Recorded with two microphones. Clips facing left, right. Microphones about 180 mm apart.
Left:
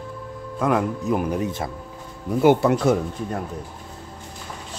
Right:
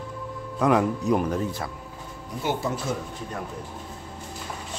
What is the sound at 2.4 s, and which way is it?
Speech, 65° left (ahead or behind).